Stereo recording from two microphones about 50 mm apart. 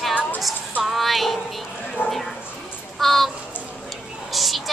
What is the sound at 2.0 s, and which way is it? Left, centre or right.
Speech, left.